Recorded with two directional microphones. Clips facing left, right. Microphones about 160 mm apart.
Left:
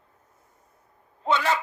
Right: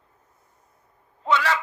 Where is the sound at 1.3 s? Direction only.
25° left (ahead or behind).